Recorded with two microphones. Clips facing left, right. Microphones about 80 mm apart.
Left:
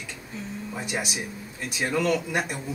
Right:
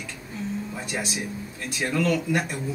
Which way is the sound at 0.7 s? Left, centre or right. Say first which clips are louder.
Even; centre.